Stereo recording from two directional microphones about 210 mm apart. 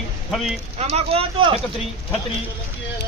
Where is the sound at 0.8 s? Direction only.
30° right (ahead or behind).